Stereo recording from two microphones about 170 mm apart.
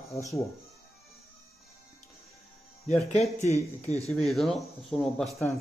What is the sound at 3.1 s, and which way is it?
Speech, 40° left (ahead or behind).